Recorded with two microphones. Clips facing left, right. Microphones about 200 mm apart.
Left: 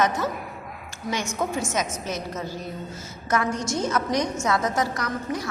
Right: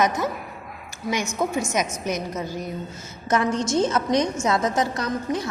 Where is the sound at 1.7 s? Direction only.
15° right (ahead or behind).